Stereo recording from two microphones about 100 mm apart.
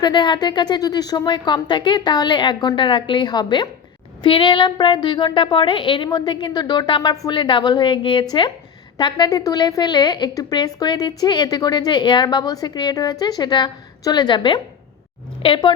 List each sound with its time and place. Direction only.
0.0 s a woman's voice: 50° left (ahead or behind)